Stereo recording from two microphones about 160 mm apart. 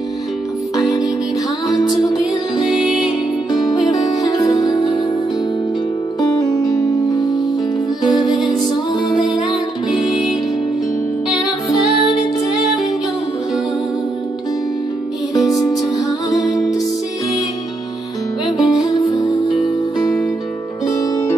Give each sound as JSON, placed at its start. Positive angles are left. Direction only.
{"t": 1.7, "sound": "music", "side_deg": 25}
{"t": 2.6, "sound": "music", "side_deg": -5}
{"t": 3.8, "sound": "music", "side_deg": 25}
{"t": 8.1, "sound": "music", "side_deg": -5}
{"t": 16.3, "sound": "music", "side_deg": 0}
{"t": 18.6, "sound": "music", "side_deg": 25}
{"t": 20.8, "sound": "music", "side_deg": 20}